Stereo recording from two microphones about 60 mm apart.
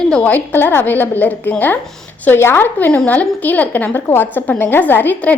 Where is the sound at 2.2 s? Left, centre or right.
Left.